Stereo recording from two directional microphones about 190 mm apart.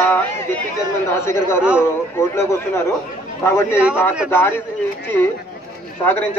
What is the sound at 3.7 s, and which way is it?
Speech, 5° right (ahead or behind).